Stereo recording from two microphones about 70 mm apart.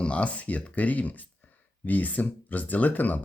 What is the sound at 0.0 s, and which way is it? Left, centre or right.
Speech, centre.